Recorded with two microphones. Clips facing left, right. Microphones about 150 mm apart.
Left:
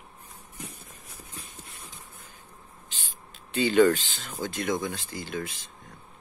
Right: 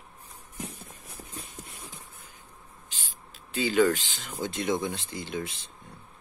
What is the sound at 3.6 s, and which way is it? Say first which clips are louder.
Speech: left 3 dB; 5° right (ahead or behind).